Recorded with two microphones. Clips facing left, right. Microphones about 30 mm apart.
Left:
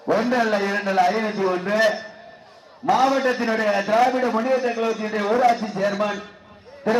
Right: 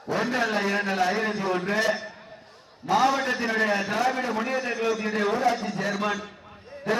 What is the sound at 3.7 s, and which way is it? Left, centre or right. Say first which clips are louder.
Speech: left 7 dB; left.